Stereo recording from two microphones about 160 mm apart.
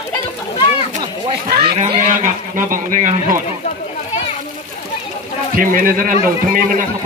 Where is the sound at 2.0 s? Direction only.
50° right (ahead or behind).